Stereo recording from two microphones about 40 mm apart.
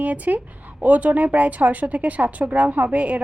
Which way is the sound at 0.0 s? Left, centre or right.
Right.